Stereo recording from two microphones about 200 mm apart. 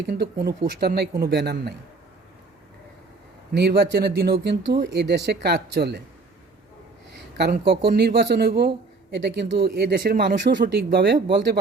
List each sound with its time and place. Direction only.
0.1 s speech: 50° right (ahead or behind)
3.5 s speech: 55° right (ahead or behind)
7.3 s speech: 55° right (ahead or behind)